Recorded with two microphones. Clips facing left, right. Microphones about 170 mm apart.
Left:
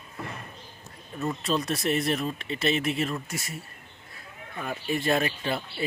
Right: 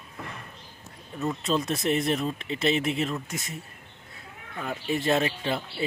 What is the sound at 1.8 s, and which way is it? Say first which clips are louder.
Speech: right 1 dB; 20° right (ahead or behind).